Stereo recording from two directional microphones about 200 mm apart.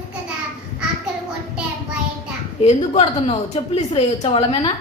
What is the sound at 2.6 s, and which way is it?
A woman's voice, 30° left (ahead or behind).